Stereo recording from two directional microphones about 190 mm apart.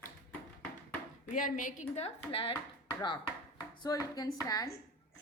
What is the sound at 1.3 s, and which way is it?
A woman's voice, 45° left (ahead or behind).